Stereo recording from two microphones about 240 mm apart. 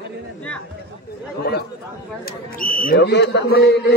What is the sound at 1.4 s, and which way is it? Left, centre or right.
A man's voice, left.